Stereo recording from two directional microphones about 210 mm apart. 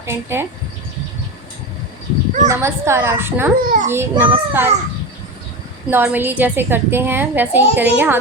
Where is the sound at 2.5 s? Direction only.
10° right (ahead or behind).